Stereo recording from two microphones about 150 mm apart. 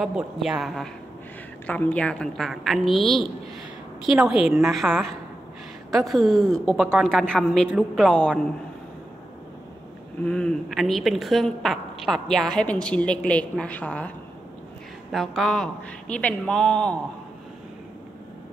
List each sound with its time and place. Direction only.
0.0 s a woman's voice: 5° right (ahead or behind)
1.7 s a woman's voice: 10° left (ahead or behind)
10.2 s a woman's voice: 5° left (ahead or behind)